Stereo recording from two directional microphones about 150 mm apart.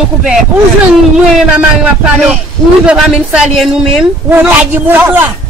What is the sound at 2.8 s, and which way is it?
Speech, 5° right (ahead or behind).